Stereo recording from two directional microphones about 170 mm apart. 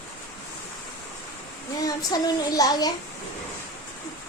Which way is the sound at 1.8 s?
20° left (ahead or behind).